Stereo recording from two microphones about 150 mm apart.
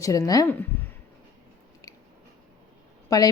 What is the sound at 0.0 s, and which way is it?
Speech, 25° left (ahead or behind).